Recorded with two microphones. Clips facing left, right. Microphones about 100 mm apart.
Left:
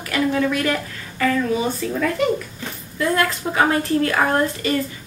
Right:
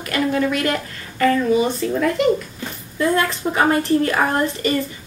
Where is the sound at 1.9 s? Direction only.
15° right (ahead or behind).